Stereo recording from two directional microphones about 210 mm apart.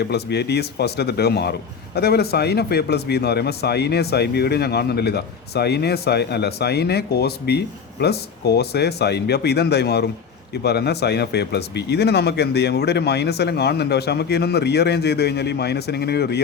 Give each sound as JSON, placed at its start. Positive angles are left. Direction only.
{"t": 0.0, "sound": "a man's voice", "side_deg": 50}